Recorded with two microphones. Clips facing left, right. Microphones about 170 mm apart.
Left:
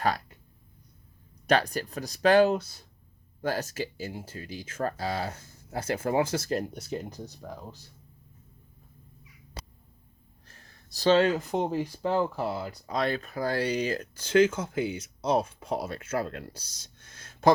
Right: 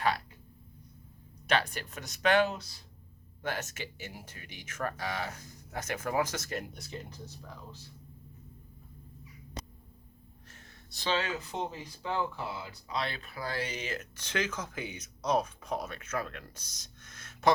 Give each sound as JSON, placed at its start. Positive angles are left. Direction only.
{"t": 1.5, "sound": "speech", "side_deg": 40}
{"t": 10.5, "sound": "speech", "side_deg": 35}